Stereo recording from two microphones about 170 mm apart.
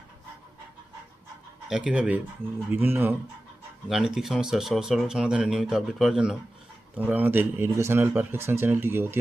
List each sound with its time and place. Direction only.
1.7 s speech: 5° right (ahead or behind)
3.8 s speech: centre (ahead or behind)